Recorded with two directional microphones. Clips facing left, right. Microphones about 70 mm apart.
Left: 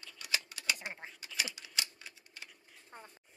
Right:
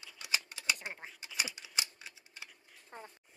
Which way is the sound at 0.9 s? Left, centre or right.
Centre.